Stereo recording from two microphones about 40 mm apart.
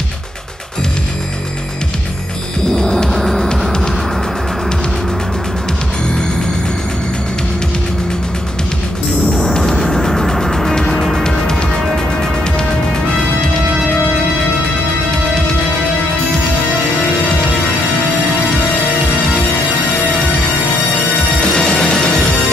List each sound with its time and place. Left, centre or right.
2.7 s music: centre
9.6 s music: centre
21.4 s music: centre